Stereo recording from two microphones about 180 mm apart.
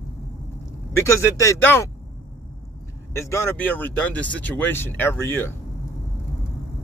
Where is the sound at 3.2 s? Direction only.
15° left (ahead or behind).